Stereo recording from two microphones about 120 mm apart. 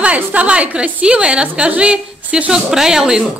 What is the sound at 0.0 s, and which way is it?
A woman's voice, 10° right (ahead or behind).